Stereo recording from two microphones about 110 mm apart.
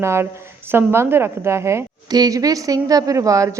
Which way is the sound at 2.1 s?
35° right (ahead or behind).